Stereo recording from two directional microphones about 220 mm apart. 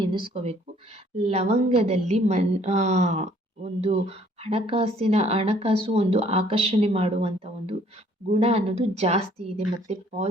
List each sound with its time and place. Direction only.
0.0 s a woman's voice: 20° right (ahead or behind)